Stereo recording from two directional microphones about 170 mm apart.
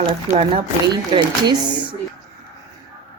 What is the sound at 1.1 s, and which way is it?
Speech, 25° right (ahead or behind).